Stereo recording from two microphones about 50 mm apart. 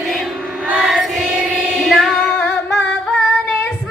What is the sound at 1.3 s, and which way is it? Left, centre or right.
Child singing, right.